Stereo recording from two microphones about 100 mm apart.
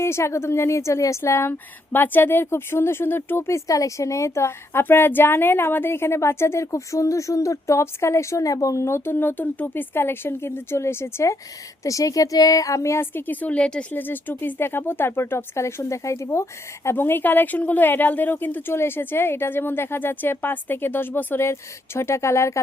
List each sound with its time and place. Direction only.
0.0 s speech: 25° left (ahead or behind)